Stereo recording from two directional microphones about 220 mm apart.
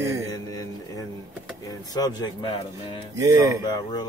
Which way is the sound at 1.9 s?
15° left (ahead or behind).